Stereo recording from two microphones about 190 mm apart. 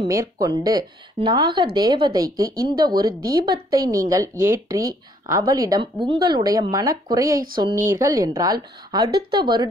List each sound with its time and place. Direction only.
0.1 s a woman's voice: 15° right (ahead or behind)